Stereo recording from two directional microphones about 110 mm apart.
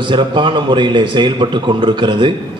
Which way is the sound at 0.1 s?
45° right (ahead or behind).